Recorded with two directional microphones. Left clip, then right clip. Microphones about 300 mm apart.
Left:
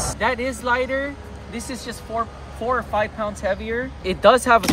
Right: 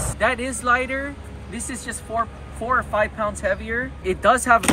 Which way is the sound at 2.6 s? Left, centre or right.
Centre.